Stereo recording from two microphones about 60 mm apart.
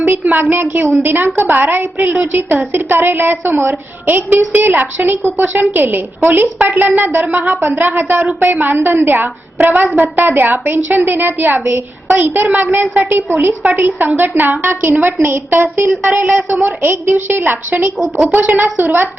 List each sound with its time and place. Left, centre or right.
0.0 s a woman's voice: right
10.2 s a woman's voice: right